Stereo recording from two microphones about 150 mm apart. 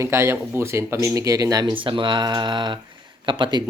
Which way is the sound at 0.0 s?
15° right (ahead or behind).